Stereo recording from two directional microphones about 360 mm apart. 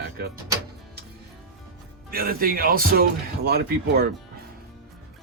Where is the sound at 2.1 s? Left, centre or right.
Right.